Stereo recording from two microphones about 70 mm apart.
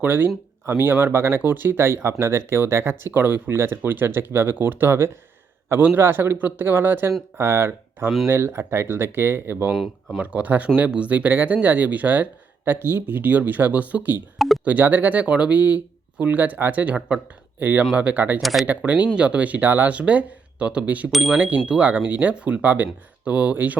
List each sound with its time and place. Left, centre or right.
0.0 s speech: right
9.7 s speech: centre
10.2 s speech: right
14.3 s speech: centre
14.6 s speech: right
21.1 s speech: centre
21.3 s speech: right